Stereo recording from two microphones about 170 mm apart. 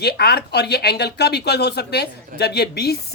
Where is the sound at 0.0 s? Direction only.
70° left (ahead or behind).